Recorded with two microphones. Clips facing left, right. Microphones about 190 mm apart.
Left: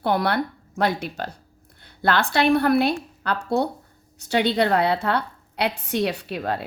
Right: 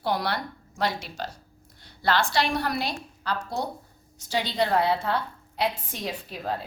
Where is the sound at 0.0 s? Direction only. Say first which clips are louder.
Left 6 dB; 55° left (ahead or behind).